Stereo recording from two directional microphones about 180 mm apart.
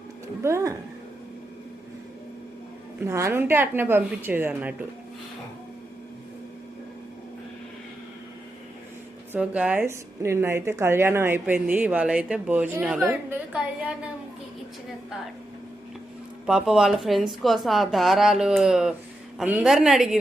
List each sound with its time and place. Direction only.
0.4 s a woman's voice: 15° right (ahead or behind)
3.0 s a woman's voice: 15° right (ahead or behind)
9.3 s a woman's voice: 5° right (ahead or behind)
16.5 s speech: 5° right (ahead or behind)